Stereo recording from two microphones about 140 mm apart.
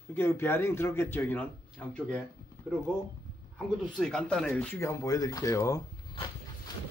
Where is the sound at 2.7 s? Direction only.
15° left (ahead or behind).